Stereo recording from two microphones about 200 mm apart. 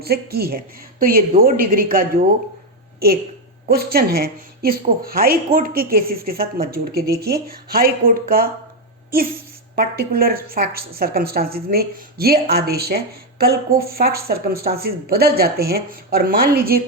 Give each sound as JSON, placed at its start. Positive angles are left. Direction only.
{"t": 0.0, "sound": "a woman's voice", "side_deg": -50}
{"t": 3.7, "sound": "a woman's voice", "side_deg": -50}
{"t": 9.7, "sound": "a woman's voice", "side_deg": -50}